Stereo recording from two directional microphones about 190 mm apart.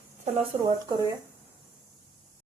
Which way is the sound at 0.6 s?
20° right (ahead or behind).